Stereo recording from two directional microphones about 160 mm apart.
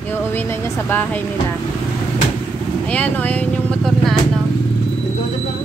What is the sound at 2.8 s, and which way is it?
Speech, 10° left (ahead or behind).